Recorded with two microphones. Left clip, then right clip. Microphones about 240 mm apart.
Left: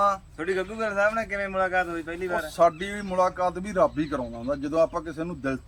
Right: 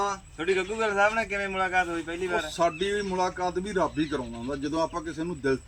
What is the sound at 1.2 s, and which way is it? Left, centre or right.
A man's voice, centre.